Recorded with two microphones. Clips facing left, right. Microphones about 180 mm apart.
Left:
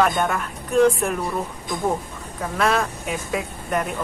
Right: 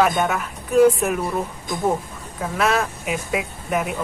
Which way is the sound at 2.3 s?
Centre (ahead or behind).